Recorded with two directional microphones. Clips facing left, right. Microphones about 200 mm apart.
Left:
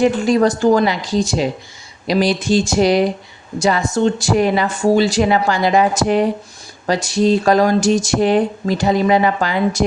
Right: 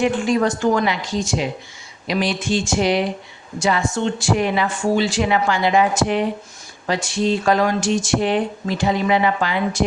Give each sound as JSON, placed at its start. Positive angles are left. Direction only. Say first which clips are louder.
{"t": 0.0, "sound": "speech", "louder": "left 4 dB", "side_deg": 35}